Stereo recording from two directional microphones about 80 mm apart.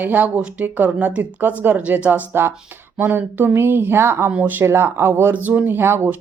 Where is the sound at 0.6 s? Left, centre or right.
Right.